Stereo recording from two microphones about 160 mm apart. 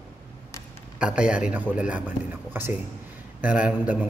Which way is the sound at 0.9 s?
5° right (ahead or behind).